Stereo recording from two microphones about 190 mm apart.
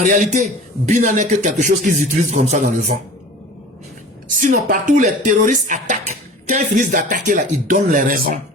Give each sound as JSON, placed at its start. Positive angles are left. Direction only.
{"t": 0.0, "sound": "a man's voice", "side_deg": -40}
{"t": 4.3, "sound": "speech", "side_deg": -45}